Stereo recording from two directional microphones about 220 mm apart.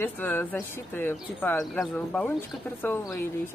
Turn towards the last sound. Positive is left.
turn(degrees=10)  # may be behind; listen again after turning